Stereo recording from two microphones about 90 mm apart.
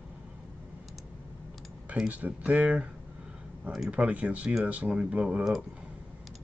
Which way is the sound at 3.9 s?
15° right (ahead or behind).